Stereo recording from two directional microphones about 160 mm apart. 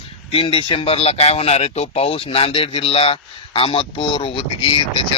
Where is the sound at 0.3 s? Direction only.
35° left (ahead or behind).